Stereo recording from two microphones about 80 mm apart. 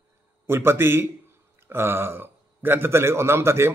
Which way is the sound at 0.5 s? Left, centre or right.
Right.